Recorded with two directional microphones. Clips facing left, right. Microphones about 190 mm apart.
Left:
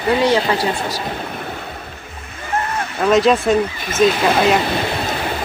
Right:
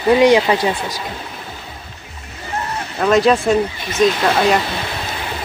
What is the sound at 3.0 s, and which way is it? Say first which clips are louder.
Speech: even; centre (ahead or behind).